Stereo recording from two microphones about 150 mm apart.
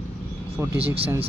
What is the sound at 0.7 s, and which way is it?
Speech, 40° right (ahead or behind).